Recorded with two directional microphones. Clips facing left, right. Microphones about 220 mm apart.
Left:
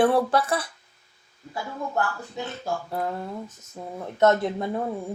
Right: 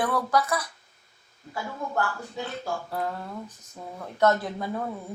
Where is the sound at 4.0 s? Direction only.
25° left (ahead or behind).